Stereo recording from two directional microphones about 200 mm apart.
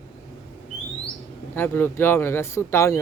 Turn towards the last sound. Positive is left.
turn(degrees=15)  # may be behind; listen again after turning